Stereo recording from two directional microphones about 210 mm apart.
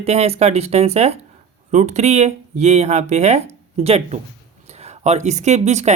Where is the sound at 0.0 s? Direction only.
30° right (ahead or behind).